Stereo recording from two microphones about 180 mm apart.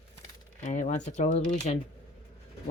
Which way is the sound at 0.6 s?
40° left (ahead or behind).